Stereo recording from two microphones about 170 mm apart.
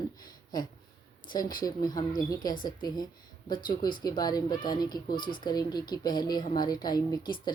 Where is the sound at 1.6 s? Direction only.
25° left (ahead or behind).